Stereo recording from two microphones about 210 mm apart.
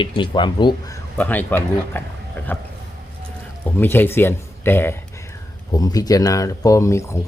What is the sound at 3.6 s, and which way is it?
Speech, 10° left (ahead or behind).